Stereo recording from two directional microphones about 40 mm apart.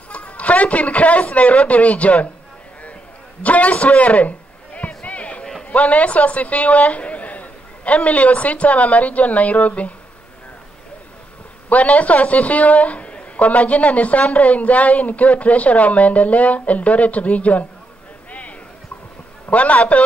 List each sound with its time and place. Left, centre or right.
0.1 s a man's voice: left
3.4 s a sound: left
5.7 s a woman's voice: left
11.7 s a man's voice: left
19.5 s a man's voice: left